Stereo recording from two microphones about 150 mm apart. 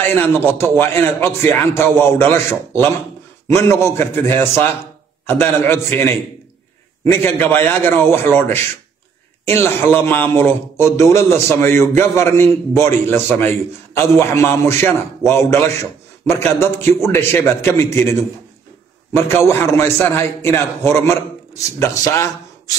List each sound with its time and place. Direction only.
0.0 s a man's voice: 15° left (ahead or behind)
19.1 s a man's voice: 15° left (ahead or behind)